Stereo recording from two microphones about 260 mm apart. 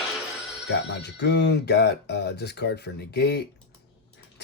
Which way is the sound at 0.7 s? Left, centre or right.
Left.